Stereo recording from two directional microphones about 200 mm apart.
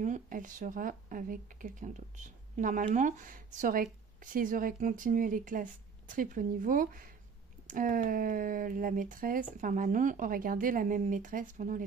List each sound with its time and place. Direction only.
0.0 s speech: 40° right (ahead or behind)